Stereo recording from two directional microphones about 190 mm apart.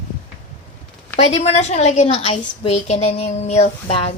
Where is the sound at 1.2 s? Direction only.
35° left (ahead or behind).